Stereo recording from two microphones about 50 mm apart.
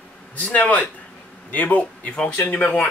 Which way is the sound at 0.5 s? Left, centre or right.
Left.